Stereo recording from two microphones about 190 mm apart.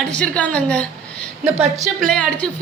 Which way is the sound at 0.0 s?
5° left (ahead or behind).